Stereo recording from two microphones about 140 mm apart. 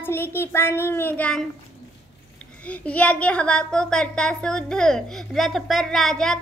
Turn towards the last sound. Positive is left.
turn(degrees=5)  # may be behind; listen again after turning